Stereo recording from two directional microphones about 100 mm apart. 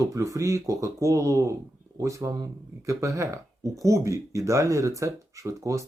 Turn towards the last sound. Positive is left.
turn(degrees=-30)  # may be behind; listen again after turning